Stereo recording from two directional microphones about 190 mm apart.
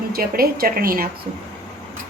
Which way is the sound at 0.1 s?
50° right (ahead or behind).